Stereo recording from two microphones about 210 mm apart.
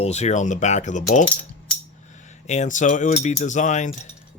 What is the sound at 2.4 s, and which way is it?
Speech, 35° left (ahead or behind).